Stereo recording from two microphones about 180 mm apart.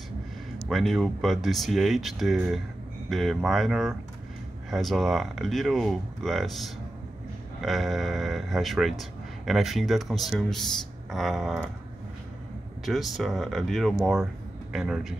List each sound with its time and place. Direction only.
0.7 s a man's voice: centre (ahead or behind)
12.8 s a man's voice: centre (ahead or behind)